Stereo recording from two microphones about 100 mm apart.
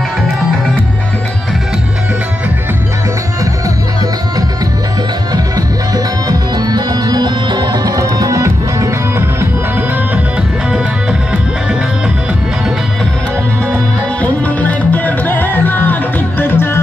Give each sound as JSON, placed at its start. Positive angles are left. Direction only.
{"t": 6.2, "sound": "music", "side_deg": -45}
{"t": 14.2, "sound": "music", "side_deg": 15}